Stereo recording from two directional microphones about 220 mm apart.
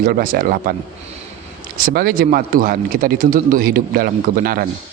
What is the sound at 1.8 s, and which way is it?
Speech, 40° right (ahead or behind).